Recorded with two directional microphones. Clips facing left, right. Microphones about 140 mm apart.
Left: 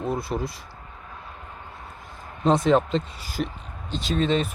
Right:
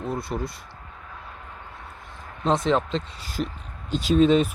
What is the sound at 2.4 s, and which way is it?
Speech, 5° left (ahead or behind).